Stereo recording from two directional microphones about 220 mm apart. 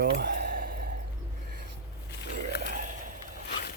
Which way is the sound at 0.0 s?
45° right (ahead or behind).